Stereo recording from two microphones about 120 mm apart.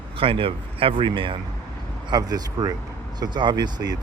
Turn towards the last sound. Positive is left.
turn(degrees=-35)  # may be behind; listen again after turning